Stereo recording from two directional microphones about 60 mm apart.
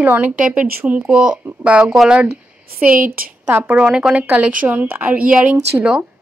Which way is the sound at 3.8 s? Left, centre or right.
Centre.